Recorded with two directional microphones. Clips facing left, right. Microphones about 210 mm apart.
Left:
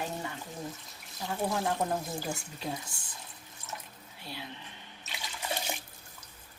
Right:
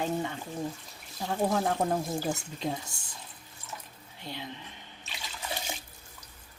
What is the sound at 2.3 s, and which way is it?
Speech, 25° right (ahead or behind).